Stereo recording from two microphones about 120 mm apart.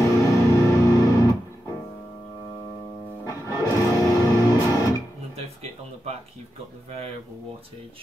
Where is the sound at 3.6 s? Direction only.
25° left (ahead or behind).